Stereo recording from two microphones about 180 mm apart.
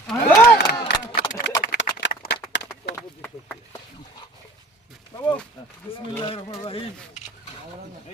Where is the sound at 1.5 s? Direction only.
80° left.